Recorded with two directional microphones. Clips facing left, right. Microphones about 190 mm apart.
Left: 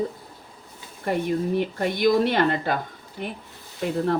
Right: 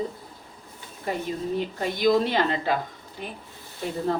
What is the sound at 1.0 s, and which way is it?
Speech, 60° left (ahead or behind).